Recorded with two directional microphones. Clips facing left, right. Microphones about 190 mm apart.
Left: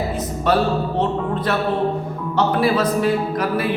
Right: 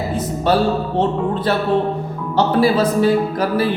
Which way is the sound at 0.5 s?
30° right (ahead or behind).